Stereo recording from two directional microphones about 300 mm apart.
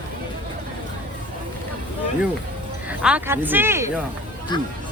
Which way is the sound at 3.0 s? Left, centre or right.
Centre.